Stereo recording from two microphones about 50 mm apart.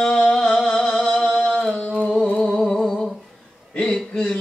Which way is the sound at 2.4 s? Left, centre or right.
Centre.